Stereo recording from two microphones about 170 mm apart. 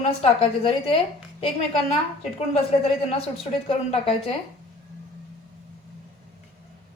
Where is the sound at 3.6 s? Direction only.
35° left (ahead or behind).